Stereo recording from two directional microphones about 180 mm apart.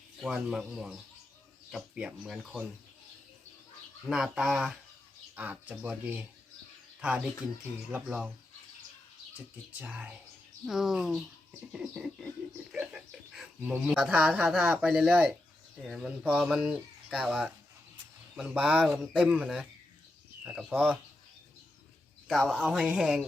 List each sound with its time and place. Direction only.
0.2 s speech: centre (ahead or behind)
4.0 s speech: 5° right (ahead or behind)
9.8 s speech: 10° right (ahead or behind)
22.3 s speech: 5° right (ahead or behind)